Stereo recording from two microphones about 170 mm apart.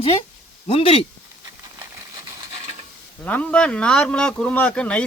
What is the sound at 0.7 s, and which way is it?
Speech, 35° left (ahead or behind).